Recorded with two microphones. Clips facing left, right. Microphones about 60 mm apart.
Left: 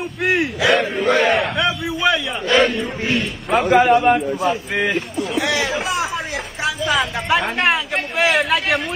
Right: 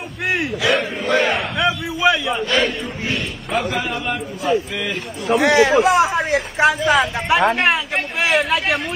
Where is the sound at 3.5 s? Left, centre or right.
Left.